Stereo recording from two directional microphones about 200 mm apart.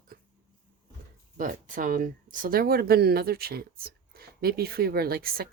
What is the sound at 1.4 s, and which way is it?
Speech, 40° right (ahead or behind).